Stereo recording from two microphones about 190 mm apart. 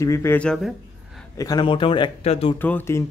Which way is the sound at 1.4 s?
20° left (ahead or behind).